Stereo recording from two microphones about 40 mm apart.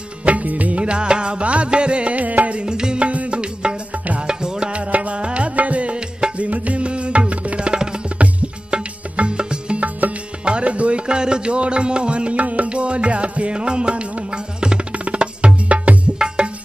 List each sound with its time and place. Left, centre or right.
0.2 s music: right
2.6 s music: right
6.3 s tabla: right
8.6 s music: right
9.8 s music: right
10.4 s music: right